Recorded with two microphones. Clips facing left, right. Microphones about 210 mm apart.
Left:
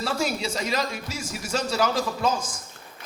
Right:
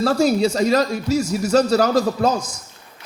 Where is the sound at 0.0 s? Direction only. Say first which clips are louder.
Right 10 dB; 40° right (ahead or behind).